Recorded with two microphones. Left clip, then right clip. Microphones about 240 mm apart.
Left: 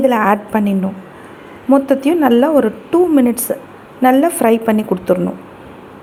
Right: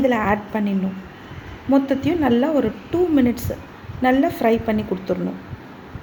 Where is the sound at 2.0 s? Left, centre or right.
Left.